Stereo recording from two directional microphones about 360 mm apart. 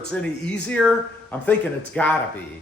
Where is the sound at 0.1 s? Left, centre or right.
Centre.